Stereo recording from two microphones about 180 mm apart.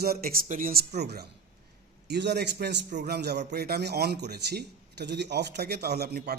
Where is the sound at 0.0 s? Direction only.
55° right (ahead or behind).